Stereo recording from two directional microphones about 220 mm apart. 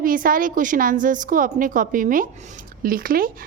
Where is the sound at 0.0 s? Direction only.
40° right (ahead or behind).